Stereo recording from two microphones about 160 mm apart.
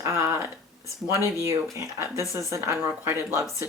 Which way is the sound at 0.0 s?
20° right (ahead or behind).